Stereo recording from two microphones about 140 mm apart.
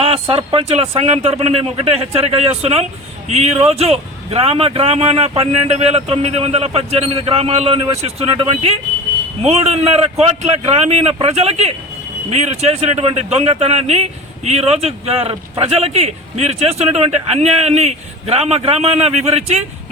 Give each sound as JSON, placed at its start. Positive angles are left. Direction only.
{"t": 0.0, "sound": "a man's voice", "side_deg": -40}